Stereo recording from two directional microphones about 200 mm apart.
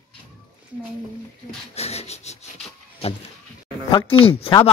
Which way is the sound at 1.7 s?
30° left (ahead or behind).